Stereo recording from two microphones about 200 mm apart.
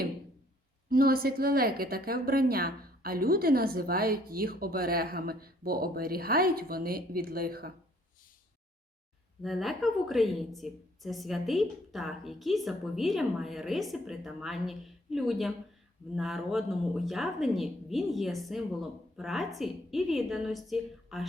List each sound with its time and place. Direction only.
0.9 s a woman's voice: 45° right (ahead or behind)
9.4 s a woman's voice: centre (ahead or behind)